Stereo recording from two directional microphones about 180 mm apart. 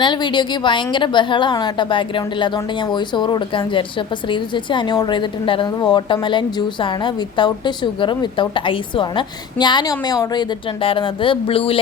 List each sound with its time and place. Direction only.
0.0 s a woman's voice: 25° left (ahead or behind)